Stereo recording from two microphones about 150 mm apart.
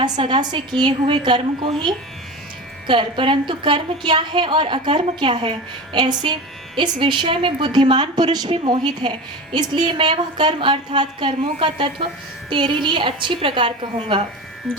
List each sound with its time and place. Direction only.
0.0 s a woman's voice: 30° right (ahead or behind)